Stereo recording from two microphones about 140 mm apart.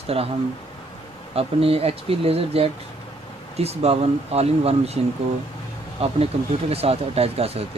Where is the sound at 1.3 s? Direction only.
45° right (ahead or behind).